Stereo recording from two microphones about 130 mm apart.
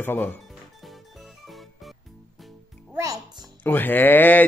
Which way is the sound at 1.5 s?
Centre (ahead or behind).